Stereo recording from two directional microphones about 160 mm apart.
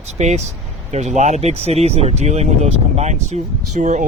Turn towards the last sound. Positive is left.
turn(degrees=-50)  # may be behind; listen again after turning